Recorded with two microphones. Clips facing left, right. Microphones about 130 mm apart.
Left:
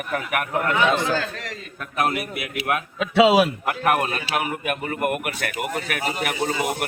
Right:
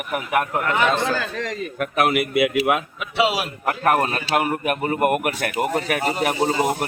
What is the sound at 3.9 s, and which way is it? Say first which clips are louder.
Speech: right 3 dB; 40° right (ahead or behind).